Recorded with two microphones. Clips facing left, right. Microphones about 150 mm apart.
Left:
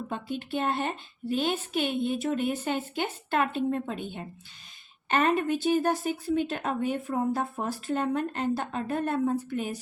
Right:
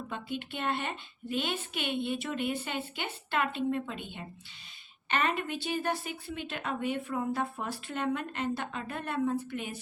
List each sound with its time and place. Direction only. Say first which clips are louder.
0.1 s a woman's voice: left 6 dB; 40° left (ahead or behind)